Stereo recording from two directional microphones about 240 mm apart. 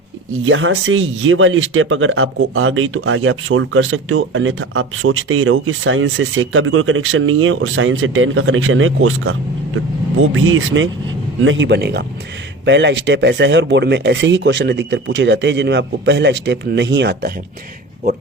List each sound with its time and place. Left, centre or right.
0.4 s speech: right
10.3 s speech: right